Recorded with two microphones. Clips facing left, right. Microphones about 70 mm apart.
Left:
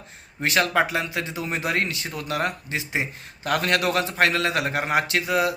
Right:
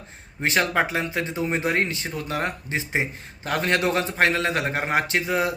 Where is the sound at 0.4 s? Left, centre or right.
Right.